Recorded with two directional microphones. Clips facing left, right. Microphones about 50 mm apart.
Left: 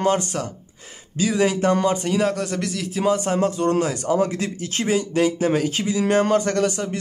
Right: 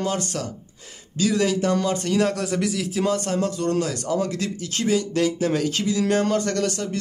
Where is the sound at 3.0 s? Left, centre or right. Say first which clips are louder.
Left 4 dB; centre.